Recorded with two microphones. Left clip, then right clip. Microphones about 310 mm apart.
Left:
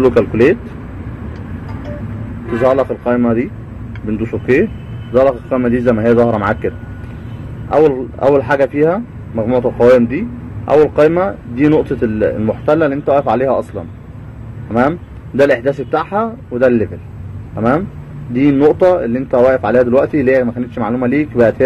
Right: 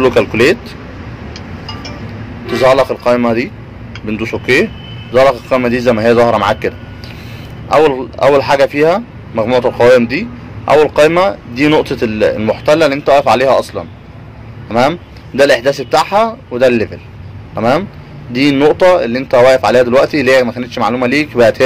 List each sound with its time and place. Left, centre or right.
0.0 s speech: right
2.6 s a man's voice: right
3.0 s speech: right
7.7 s speech: right
14.7 s speech: right
18.3 s speech: right